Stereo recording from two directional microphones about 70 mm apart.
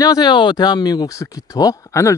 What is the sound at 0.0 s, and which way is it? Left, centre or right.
Speech, left.